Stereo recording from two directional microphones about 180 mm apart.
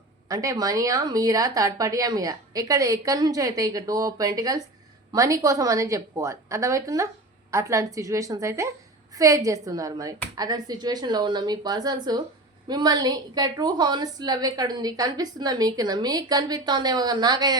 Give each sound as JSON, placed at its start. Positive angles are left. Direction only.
{"t": 0.3, "sound": "a woman's voice", "side_deg": -20}